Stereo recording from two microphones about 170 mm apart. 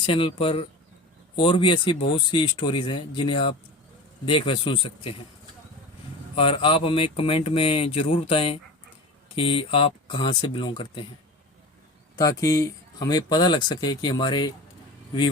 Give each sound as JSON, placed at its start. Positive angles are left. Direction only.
{"t": 0.0, "sound": "speech", "side_deg": 30}
{"t": 6.3, "sound": "speech", "side_deg": 30}
{"t": 12.1, "sound": "speech", "side_deg": 20}